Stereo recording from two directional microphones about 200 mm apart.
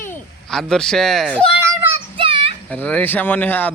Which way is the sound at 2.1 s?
25° right (ahead or behind).